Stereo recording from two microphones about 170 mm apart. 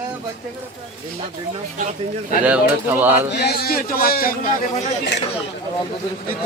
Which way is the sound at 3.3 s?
75° left (ahead or behind).